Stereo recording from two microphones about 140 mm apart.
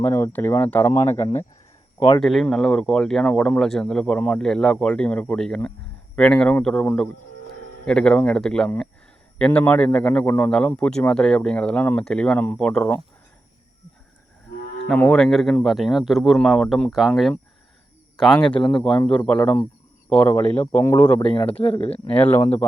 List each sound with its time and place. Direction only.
0.0 s a man's voice: 15° left (ahead or behind)
2.2 s a man's voice: 5° left (ahead or behind)
14.9 s a man's voice: 10° left (ahead or behind)
21.6 s speech: 45° left (ahead or behind)
22.1 s a man's voice: 10° left (ahead or behind)